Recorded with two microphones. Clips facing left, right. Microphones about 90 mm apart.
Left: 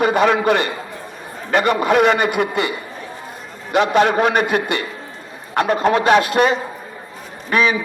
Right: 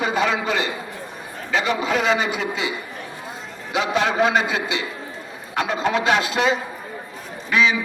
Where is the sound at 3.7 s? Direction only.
55° left (ahead or behind).